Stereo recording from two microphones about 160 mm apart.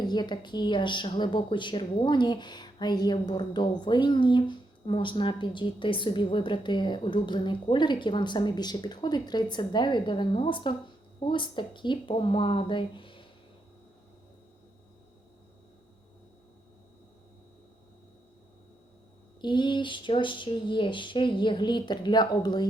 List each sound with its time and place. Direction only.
0.0 s a woman's voice: 25° left (ahead or behind)
19.4 s a woman's voice: 30° left (ahead or behind)